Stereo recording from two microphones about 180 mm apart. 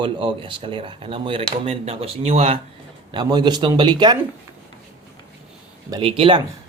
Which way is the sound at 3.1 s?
25° right (ahead or behind).